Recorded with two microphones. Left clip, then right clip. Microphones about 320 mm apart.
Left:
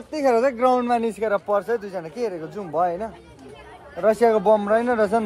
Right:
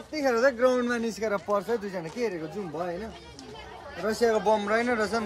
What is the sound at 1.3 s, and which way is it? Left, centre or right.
Speech, centre.